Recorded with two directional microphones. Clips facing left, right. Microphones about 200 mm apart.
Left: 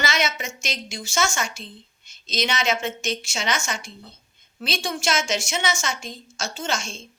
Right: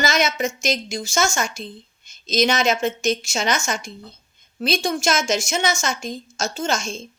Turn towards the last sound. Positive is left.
turn(degrees=-40)  # may be behind; listen again after turning